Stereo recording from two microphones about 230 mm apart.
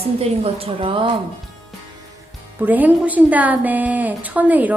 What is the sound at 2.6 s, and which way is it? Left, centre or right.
Speech, centre.